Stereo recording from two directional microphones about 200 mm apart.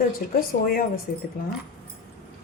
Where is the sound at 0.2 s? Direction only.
45° left (ahead or behind).